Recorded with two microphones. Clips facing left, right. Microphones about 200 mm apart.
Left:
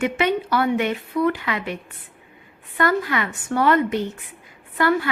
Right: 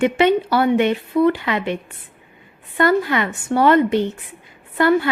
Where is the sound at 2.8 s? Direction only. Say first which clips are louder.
Right 4 dB; 30° right (ahead or behind).